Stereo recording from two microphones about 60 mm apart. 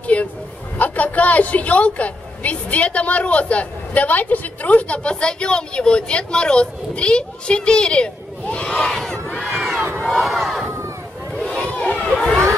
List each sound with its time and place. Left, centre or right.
0.0 s a sound: left
0.7 s a woman's voice: left; by 9.2 s centre
9.3 s crowd: centre
10.0 s battle cry: centre
11.3 s crowd: centre